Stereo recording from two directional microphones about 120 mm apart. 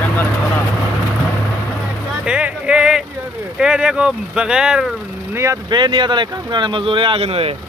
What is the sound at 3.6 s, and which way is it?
Speech, 5° right (ahead or behind).